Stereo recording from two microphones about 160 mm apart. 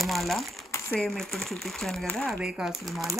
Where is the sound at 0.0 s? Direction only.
Centre (ahead or behind).